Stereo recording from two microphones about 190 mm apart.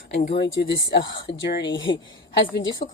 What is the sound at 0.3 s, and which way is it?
Speech, 65° left (ahead or behind).